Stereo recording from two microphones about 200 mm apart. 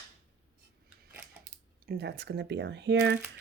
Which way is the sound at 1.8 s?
55° right (ahead or behind).